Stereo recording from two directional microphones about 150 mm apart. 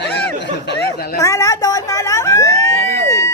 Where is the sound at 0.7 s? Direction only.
90° left.